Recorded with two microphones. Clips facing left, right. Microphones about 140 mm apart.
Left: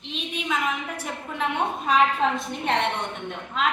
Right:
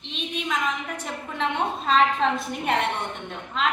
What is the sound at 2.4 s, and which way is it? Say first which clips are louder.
Speech: even; 5° right (ahead or behind).